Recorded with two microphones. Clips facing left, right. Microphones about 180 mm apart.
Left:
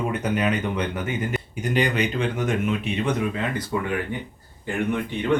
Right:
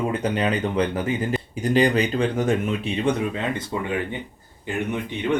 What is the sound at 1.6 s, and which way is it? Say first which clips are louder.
Speech: right 4 dB; 35° right (ahead or behind).